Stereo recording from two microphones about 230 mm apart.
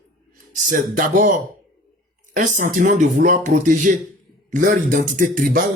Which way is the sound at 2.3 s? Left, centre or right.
Right.